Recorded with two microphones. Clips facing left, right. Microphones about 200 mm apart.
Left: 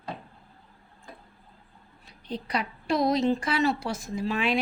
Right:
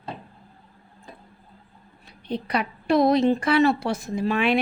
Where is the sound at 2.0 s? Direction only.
60° right (ahead or behind).